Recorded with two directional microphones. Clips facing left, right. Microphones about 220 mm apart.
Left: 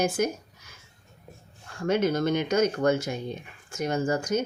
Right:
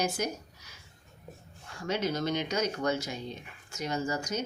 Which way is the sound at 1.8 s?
50° left (ahead or behind).